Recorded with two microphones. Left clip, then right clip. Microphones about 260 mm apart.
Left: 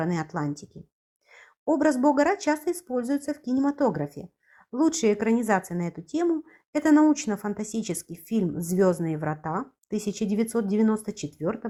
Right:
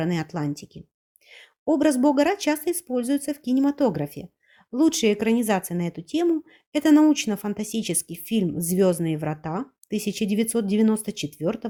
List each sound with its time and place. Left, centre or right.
0.0 s speech: right